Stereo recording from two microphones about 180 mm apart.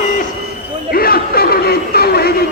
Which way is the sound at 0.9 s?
55° left (ahead or behind).